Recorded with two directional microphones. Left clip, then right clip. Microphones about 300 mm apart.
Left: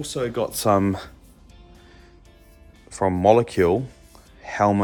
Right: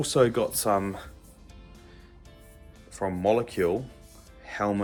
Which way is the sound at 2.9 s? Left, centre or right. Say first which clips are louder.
Left 8 dB; centre.